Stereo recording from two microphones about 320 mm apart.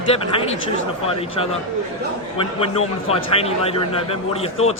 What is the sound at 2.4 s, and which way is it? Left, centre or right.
A man's voice, centre.